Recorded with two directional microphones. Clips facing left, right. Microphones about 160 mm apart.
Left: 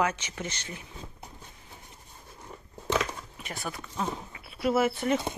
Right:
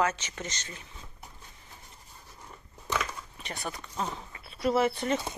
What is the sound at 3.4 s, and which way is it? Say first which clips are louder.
Speech: even; centre (ahead or behind).